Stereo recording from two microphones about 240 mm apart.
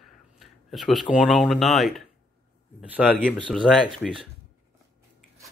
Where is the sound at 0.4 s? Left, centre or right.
Centre.